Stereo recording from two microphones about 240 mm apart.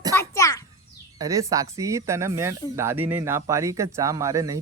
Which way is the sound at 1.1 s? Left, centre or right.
Centre.